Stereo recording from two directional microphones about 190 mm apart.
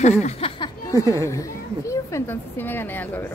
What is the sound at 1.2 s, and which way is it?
Speech, 15° left (ahead or behind).